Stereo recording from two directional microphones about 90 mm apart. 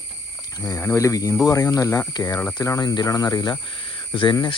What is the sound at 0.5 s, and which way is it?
Speech, 40° left (ahead or behind).